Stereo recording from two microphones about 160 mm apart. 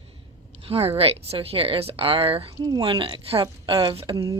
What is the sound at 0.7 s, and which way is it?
Speech, 40° right (ahead or behind).